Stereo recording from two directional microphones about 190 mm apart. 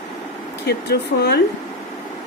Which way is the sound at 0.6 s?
60° left (ahead or behind).